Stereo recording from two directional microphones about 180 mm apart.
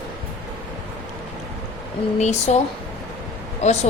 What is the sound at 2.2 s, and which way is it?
Speech, 40° left (ahead or behind).